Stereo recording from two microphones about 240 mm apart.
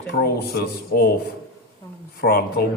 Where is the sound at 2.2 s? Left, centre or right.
Left.